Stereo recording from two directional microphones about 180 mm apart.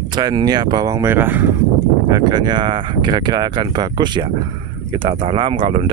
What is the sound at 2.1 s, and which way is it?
Speech, 25° right (ahead or behind).